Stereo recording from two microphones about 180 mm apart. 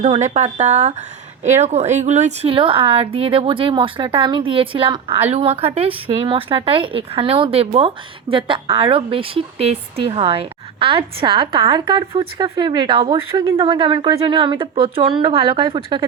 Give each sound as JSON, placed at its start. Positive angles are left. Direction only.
{"t": 0.0, "sound": "a woman's voice", "side_deg": -40}